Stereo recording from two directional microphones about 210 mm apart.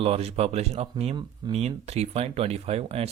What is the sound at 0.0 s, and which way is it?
Speech, 30° right (ahead or behind).